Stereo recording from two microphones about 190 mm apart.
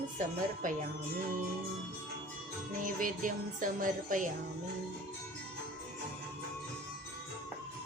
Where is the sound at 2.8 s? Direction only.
45° right (ahead or behind).